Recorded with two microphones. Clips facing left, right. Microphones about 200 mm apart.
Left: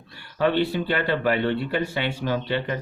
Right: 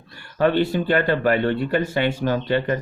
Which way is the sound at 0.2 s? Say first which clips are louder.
Right 3 dB; 45° right (ahead or behind).